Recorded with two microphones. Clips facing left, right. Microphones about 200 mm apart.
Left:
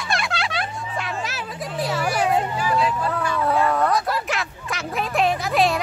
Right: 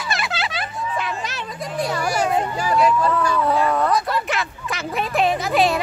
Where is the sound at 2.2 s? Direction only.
40° right (ahead or behind).